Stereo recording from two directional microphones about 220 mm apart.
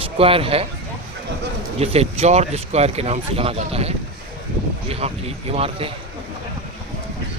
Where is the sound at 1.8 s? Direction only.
30° right (ahead or behind).